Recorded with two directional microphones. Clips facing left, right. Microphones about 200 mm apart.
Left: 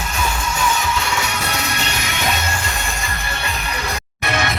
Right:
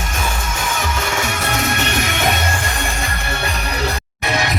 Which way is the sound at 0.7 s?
50° right (ahead or behind).